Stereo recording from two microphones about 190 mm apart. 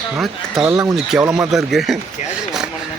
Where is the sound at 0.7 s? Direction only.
15° right (ahead or behind).